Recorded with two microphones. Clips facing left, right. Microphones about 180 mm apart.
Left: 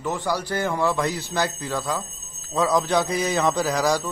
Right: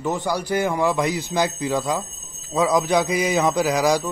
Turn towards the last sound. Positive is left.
turn(degrees=-15)  # may be behind; listen again after turning